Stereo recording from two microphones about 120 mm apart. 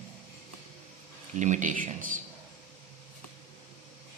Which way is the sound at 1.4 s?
90° right.